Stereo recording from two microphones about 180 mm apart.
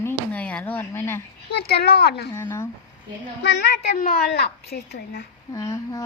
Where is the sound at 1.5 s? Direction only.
60° left (ahead or behind).